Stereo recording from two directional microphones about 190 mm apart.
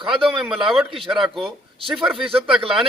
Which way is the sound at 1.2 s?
Centre (ahead or behind).